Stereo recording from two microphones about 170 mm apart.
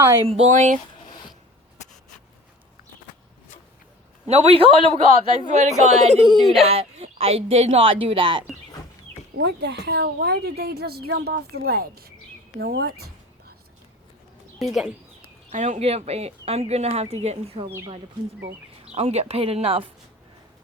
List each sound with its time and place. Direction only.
0.3 s speech: 40° right (ahead or behind)
4.3 s speech: 35° right (ahead or behind)
6.2 s speech: centre (ahead or behind)
6.7 s speech: 40° right (ahead or behind)
9.4 s a woman's voice: 85° right; by 12.9 s 65° right (ahead or behind)
14.6 s speech: centre (ahead or behind)
15.2 s speech: 45° right (ahead or behind)
17.7 s speech: 15° right (ahead or behind)
18.9 s speech: 40° right (ahead or behind)